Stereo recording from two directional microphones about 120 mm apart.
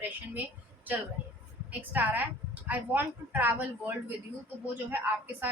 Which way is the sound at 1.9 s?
15° right (ahead or behind).